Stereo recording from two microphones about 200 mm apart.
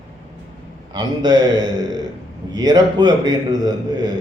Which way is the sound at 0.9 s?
20° right (ahead or behind).